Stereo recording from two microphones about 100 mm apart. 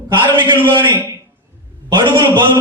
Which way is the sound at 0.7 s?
50° right (ahead or behind).